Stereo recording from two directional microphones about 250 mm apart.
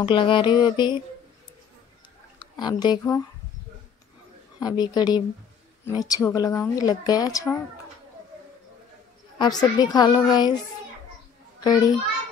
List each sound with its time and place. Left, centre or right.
0.0 s music: left
2.3 s speech: centre
4.6 s a woman's voice: centre
9.4 s a woman's voice: centre
11.6 s a child's voice: centre